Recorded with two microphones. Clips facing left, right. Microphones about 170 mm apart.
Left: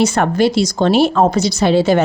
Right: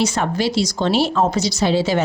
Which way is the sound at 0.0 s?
55° left (ahead or behind).